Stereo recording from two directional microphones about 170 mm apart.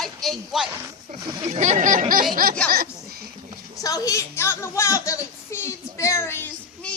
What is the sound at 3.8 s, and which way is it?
A woman's voice, 20° left (ahead or behind).